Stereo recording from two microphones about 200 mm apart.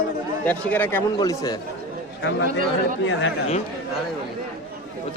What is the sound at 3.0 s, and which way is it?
Speech, 65° left (ahead or behind).